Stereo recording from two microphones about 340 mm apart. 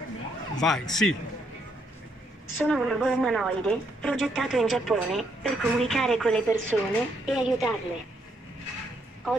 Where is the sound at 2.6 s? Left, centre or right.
Centre.